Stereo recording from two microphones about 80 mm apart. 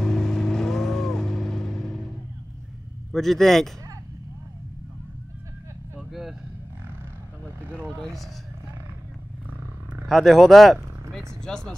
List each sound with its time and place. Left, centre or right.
0.0 s vehicle: centre
3.1 s speech: centre
5.9 s vehicle: centre
8.0 s speech: centre
10.0 s vehicle: centre
11.4 s speech: centre